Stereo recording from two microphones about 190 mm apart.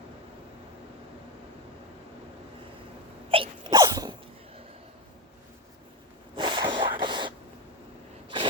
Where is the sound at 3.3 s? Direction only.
30° right (ahead or behind).